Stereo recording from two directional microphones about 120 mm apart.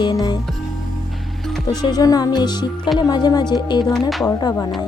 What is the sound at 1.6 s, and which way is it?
Speech, 35° left (ahead or behind).